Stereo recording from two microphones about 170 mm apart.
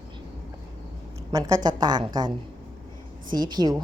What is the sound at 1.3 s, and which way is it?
Speech, 25° right (ahead or behind).